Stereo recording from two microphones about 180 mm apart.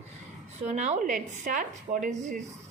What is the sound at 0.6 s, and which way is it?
Speech, 40° right (ahead or behind).